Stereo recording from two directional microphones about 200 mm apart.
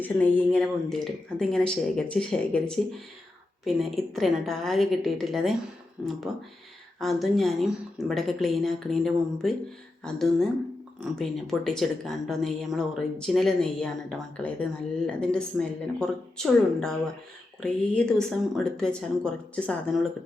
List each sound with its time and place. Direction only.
0.0 s speech: 5° left (ahead or behind)
7.0 s speech: centre (ahead or behind)